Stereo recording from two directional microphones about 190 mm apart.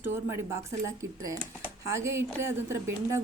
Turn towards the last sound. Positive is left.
turn(degrees=-15)  # may be behind; listen again after turning